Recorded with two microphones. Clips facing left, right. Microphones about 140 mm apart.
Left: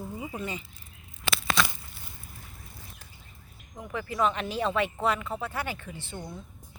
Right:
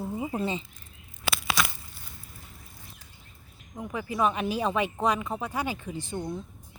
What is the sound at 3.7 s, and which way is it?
Speech, 15° right (ahead or behind).